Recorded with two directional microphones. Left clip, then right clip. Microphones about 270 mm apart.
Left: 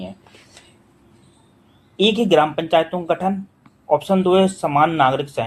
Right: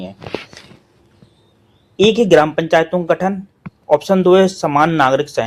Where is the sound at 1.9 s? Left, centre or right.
Centre.